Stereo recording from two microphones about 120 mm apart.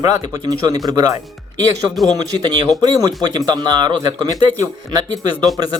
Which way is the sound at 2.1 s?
35° right (ahead or behind).